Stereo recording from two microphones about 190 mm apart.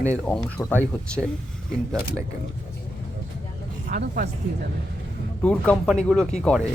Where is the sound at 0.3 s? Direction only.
5° left (ahead or behind).